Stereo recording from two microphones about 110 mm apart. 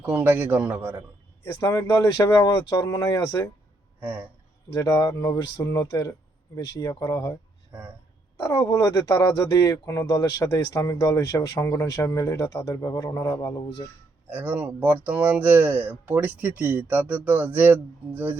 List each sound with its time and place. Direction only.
0.0 s speech: 20° right (ahead or behind)
1.6 s speech: 30° left (ahead or behind)
4.0 s speech: 15° right (ahead or behind)
4.7 s speech: 30° left (ahead or behind)
7.7 s speech: 15° right (ahead or behind)
8.4 s speech: 30° left (ahead or behind)
14.3 s speech: 15° right (ahead or behind)